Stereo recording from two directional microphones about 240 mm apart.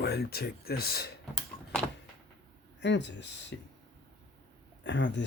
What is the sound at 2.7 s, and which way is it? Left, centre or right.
Speech, left.